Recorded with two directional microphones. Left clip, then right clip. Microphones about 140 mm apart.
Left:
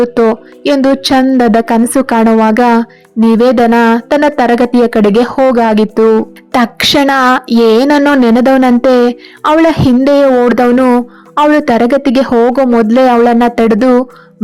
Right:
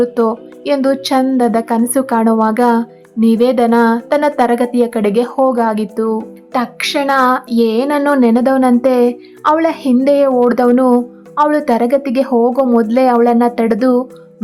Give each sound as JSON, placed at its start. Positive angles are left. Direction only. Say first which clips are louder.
{"t": 0.0, "sound": "speech", "louder": "left 5 dB", "side_deg": 35}
{"t": 6.5, "sound": "speech", "louder": "left 7 dB", "side_deg": 45}